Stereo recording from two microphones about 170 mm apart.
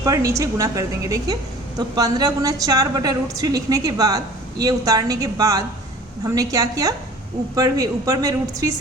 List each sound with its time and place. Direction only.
0.0 s a woman's voice: 20° right (ahead or behind)